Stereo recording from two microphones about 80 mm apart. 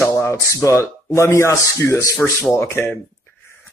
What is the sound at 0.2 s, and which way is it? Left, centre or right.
Speech, left.